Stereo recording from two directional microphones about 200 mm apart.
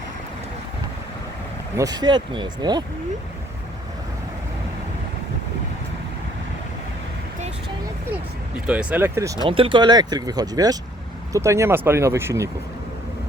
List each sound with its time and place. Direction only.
1.7 s speech: 20° right (ahead or behind)
8.6 s speech: 5° right (ahead or behind)